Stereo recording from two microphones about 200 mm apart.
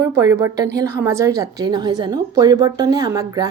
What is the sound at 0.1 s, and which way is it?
Speech, 15° right (ahead or behind).